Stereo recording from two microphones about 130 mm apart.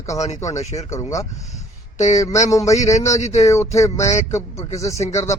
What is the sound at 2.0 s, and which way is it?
Speech, 65° left (ahead or behind).